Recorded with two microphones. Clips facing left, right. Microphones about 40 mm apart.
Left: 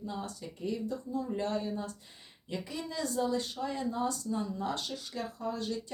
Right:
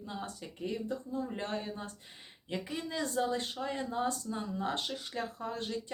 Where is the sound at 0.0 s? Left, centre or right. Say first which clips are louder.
Left 2 dB; right.